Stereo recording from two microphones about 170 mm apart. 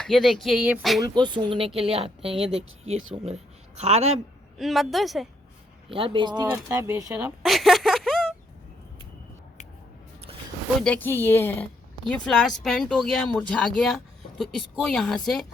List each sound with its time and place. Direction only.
0.0 s speech: centre (ahead or behind)
1.0 s speech: 25° right (ahead or behind)
4.5 s speech: centre (ahead or behind)
5.9 s speech: 30° right (ahead or behind)
7.4 s a sound: centre (ahead or behind)
10.8 s a woman's voice: 10° left (ahead or behind)